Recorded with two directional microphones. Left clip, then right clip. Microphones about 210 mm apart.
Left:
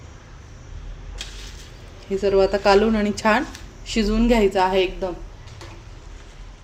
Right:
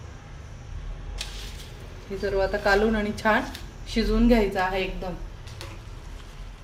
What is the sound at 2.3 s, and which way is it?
A woman's voice, 40° left (ahead or behind).